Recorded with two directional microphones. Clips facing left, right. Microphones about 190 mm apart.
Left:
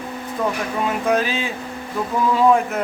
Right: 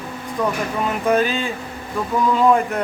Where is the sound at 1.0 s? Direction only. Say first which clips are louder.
Right 4 dB; centre (ahead or behind).